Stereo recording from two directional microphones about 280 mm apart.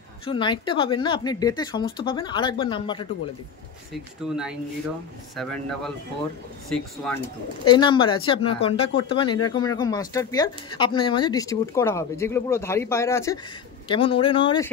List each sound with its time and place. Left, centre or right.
0.2 s speech: centre
4.2 s speech: centre
7.6 s speech: centre